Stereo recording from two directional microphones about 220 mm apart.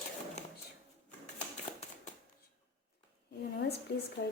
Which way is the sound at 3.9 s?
50° left (ahead or behind).